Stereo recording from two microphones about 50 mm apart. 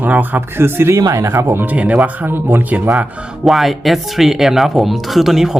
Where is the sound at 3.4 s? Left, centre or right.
Centre.